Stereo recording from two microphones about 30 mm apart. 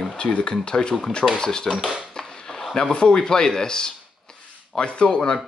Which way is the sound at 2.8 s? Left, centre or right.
Left.